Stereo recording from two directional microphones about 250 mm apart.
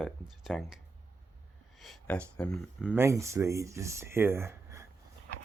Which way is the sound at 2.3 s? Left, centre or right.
Centre.